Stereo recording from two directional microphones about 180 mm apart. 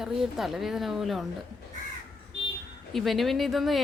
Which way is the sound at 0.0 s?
Centre (ahead or behind).